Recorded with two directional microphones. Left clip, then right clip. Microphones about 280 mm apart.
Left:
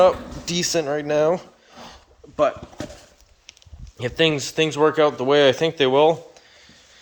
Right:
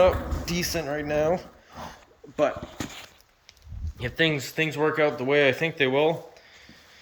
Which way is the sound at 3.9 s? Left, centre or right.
Centre.